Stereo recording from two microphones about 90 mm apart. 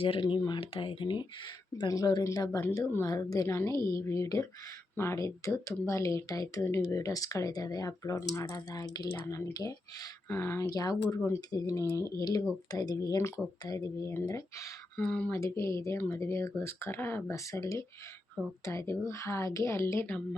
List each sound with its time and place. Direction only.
0.0 s speech: 75° left (ahead or behind)
0.3 s speech: 50° left (ahead or behind)
0.6 s speech: 85° left; by 1.3 s 60° left (ahead or behind)
1.9 s speech: 45° left (ahead or behind)
10.2 s speech: 25° left (ahead or behind)
10.7 s speech: 45° left (ahead or behind)
14.9 s speech: 15° left (ahead or behind)
15.3 s speech: 35° left (ahead or behind)